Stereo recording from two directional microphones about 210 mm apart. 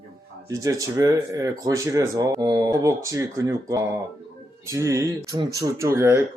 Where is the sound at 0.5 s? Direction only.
15° right (ahead or behind).